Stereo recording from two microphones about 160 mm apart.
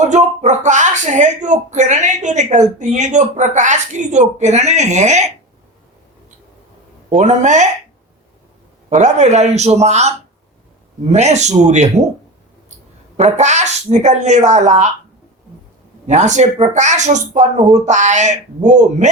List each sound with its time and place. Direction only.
0.0 s speech: 45° right (ahead or behind)
7.1 s speech: 50° right (ahead or behind)
8.9 s speech: 45° right (ahead or behind)
13.1 s speech: 45° right (ahead or behind)
16.0 s speech: 50° right (ahead or behind)